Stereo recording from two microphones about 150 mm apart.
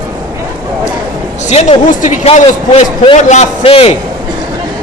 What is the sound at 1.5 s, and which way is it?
A man's voice, 50° left (ahead or behind).